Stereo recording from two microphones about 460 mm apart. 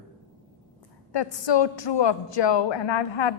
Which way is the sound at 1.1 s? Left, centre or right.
Left.